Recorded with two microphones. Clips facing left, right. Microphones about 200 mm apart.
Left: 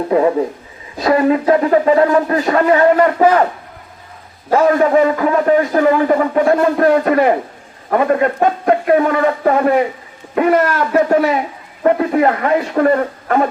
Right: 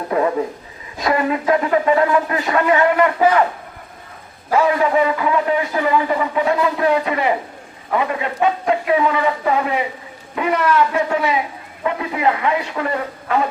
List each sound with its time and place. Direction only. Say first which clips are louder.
0.1 s a sound: left 5 dB; 25° left (ahead or behind)
0.9 s speech: left 6 dB; 35° left (ahead or behind)
4.5 s a man's voice: left 4 dB; 45° left (ahead or behind)